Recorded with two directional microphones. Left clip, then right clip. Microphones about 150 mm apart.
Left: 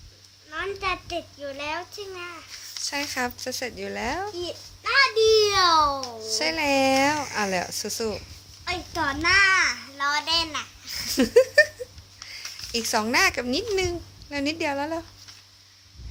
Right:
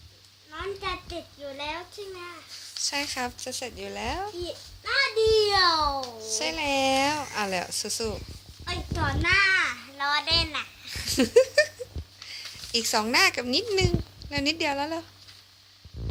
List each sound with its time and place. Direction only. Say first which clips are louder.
0.5 s a child's voice: left 5 dB; 10° right (ahead or behind)
2.8 s speech: left 2 dB; 5° left (ahead or behind)
3.3 s a child's voice: left 4 dB; 20° left (ahead or behind)
5.1 s a child's voice: left 2 dB; 15° right (ahead or behind)
6.0 s a child's voice: left 3 dB; 25° left (ahead or behind)
8.6 s a sound: left 3 dB; 5° right (ahead or behind)
11.1 s a sound: left 2 dB; centre (ahead or behind)
12.3 s speech: right 1 dB; centre (ahead or behind)